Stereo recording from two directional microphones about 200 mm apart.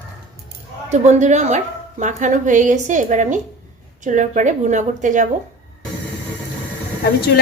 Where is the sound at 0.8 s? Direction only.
35° right (ahead or behind).